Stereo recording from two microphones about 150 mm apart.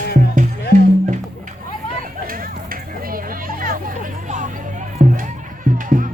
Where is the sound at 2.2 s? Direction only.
70° right (ahead or behind).